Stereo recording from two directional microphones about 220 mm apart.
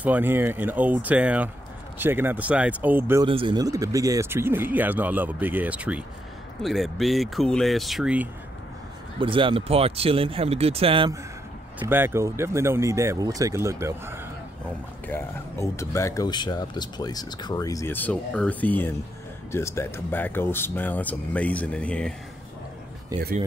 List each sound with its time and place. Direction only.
0.0 s speech: 10° right (ahead or behind)
3.3 s speech: 25° right (ahead or behind); by 8.3 s 5° right (ahead or behind)
9.2 s speech: 25° right (ahead or behind)
11.8 s speech: 10° right (ahead or behind)
15.0 s speech: 10° left (ahead or behind)